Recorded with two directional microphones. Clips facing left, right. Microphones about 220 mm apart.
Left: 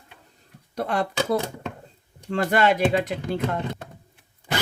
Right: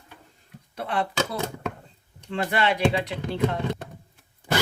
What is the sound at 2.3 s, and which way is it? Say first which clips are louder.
Speech: left 4 dB; 45° left (ahead or behind).